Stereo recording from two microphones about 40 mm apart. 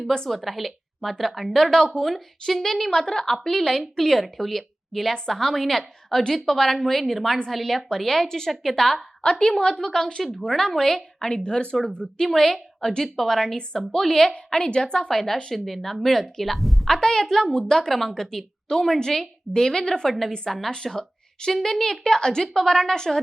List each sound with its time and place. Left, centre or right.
0.3 s a woman's voice: centre
2.9 s a woman's voice: centre
9.2 s a woman's voice: left
9.8 s a woman's voice: centre
11.3 s a woman's voice: centre
15.1 s a woman's voice: centre
16.9 s a woman's voice: centre
17.7 s a woman's voice: centre